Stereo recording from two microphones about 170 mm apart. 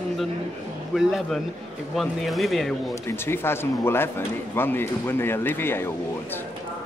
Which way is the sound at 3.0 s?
15° left (ahead or behind).